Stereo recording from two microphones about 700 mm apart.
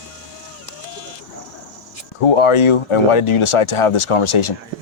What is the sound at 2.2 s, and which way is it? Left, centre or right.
Speech, left.